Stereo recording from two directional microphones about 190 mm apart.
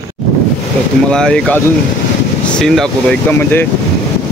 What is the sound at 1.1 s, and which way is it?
Speech, 5° left (ahead or behind).